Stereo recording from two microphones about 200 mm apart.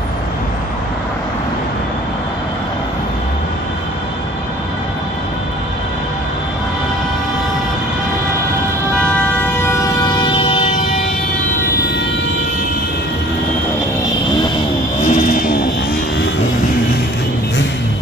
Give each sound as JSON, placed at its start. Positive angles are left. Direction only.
{"t": 9.1, "sound": "siren", "side_deg": 15}
{"t": 15.0, "sound": "vehicle", "side_deg": 40}